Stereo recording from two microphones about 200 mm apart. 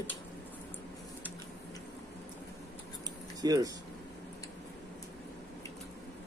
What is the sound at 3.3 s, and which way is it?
Speech, 20° right (ahead or behind).